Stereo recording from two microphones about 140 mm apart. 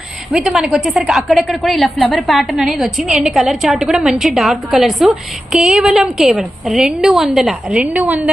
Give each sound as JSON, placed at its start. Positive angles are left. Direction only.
{"t": 0.3, "sound": "a woman's voice", "side_deg": -5}